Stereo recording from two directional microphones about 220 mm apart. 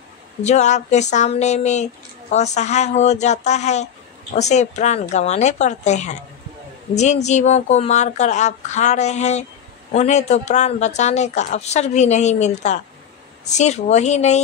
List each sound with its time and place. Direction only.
0.4 s speech: 30° left (ahead or behind)
7.2 s speech: 30° left (ahead or behind)